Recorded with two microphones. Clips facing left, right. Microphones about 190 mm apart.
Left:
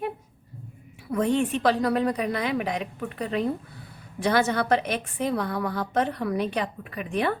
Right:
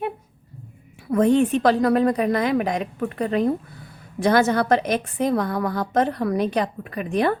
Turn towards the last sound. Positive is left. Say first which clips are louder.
# right 5 dB
turn(degrees=-40)  # may be behind; listen again after turning